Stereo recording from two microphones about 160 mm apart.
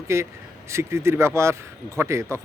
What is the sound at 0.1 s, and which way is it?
Speech, 15° right (ahead or behind).